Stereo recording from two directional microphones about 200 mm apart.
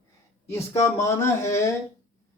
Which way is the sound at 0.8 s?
15° left (ahead or behind).